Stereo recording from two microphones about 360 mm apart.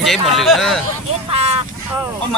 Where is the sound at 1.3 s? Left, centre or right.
Centre.